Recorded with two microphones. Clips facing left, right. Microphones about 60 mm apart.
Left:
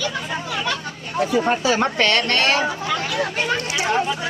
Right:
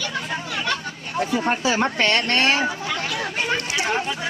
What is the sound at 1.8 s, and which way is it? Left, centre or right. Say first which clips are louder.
Speech: left 2 dB; right.